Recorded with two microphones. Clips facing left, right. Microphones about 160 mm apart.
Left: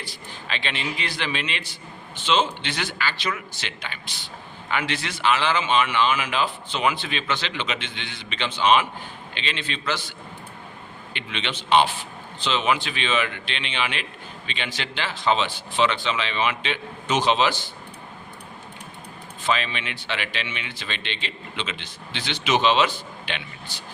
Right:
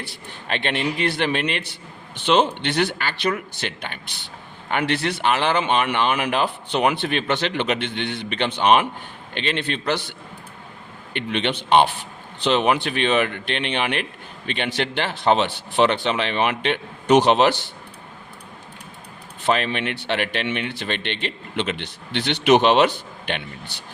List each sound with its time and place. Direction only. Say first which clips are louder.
0.0 s a man's voice: right 2 dB; 65° right (ahead or behind)
11.1 s a man's voice: right 8 dB; 55° right (ahead or behind)
19.4 s a man's voice: right 4 dB; 60° right (ahead or behind)